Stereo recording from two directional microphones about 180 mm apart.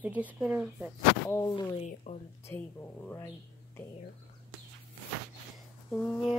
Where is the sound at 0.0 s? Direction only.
10° right (ahead or behind).